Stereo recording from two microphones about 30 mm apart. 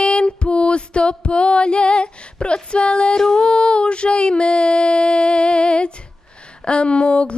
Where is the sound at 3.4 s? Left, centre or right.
Left.